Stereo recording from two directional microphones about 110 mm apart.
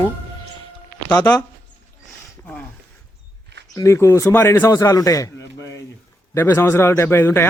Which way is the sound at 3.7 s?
30° left (ahead or behind).